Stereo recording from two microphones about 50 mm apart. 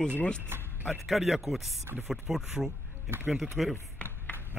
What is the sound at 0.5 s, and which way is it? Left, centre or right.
Speech, right.